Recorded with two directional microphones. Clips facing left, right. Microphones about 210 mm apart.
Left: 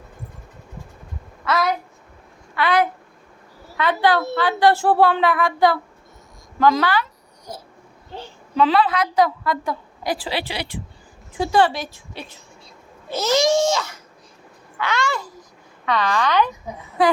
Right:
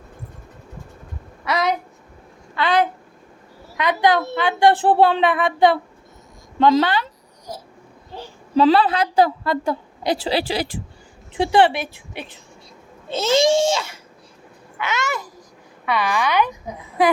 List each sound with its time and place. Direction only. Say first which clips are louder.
1.5 s a woman's voice: even; 20° right (ahead or behind)
2.6 s a woman's voice: even; 30° right (ahead or behind)
3.8 s a woman's voice: right 1 dB; 15° right (ahead or behind)
8.5 s a woman's voice: right 3 dB; 35° right (ahead or behind)
13.1 s a woman's voice: right 2 dB; 25° right (ahead or behind); by 16.6 s 10° right (ahead or behind)